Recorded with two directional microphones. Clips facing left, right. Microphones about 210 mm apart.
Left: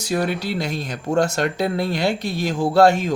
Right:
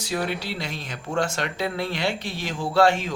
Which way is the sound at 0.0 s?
45° left (ahead or behind).